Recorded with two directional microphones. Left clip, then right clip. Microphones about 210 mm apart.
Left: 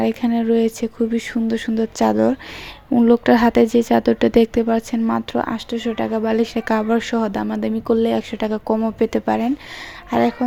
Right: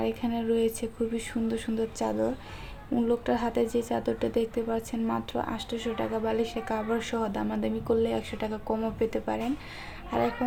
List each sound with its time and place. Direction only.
0.0 s speech: 35° left (ahead or behind)